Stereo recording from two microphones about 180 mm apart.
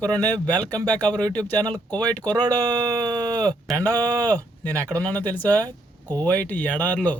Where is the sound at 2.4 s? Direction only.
20° right (ahead or behind).